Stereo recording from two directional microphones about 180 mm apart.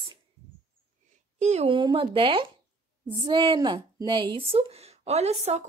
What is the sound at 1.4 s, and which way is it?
A woman's voice, 35° right (ahead or behind).